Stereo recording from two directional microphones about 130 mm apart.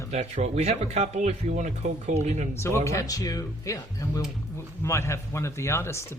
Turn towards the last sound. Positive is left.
turn(degrees=20)  # may be behind; listen again after turning